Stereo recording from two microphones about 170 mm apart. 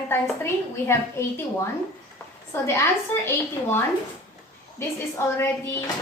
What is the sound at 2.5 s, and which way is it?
Speech, 15° left (ahead or behind).